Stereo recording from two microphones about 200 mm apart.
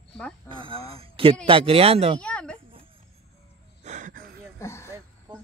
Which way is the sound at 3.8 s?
35° right (ahead or behind).